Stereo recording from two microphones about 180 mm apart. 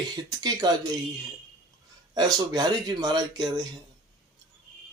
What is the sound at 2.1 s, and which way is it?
Speech, 20° right (ahead or behind).